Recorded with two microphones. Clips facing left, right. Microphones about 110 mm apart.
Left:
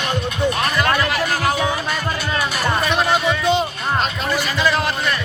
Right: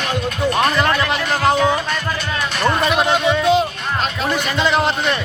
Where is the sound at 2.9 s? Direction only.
Centre (ahead or behind).